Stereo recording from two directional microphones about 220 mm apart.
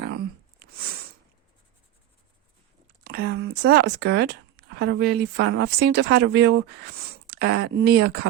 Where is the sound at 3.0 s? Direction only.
45° right (ahead or behind).